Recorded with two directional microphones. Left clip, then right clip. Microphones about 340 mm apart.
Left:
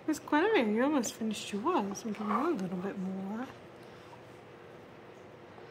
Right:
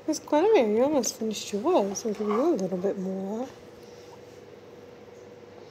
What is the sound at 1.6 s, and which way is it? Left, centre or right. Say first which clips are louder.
Speech: right 8 dB; left.